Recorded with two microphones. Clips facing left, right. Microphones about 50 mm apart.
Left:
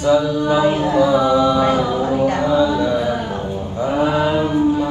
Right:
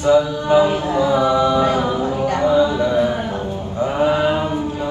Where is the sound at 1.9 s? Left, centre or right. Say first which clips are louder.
Left 2 dB; left.